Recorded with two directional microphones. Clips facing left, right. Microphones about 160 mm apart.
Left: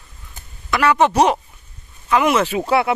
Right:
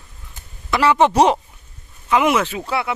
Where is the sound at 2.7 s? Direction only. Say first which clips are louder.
Left 6 dB; 55° left (ahead or behind).